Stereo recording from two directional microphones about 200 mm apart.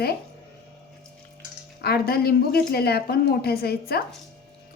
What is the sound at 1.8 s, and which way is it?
A woman's voice, 50° left (ahead or behind).